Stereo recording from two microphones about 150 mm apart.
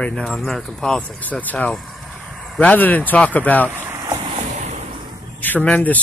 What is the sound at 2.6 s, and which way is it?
Speech, 10° left (ahead or behind).